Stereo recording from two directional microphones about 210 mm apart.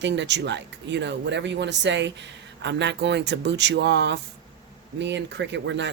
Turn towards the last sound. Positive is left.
turn(degrees=-60)  # may be behind; listen again after turning